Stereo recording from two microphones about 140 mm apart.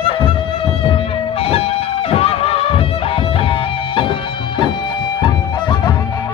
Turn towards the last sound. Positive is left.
turn(degrees=30)  # may be behind; listen again after turning